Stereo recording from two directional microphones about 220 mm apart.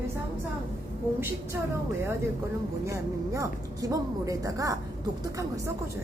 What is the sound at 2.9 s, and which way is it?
A woman's voice, 15° right (ahead or behind).